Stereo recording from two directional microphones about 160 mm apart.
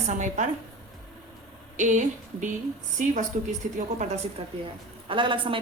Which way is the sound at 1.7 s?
50° right (ahead or behind).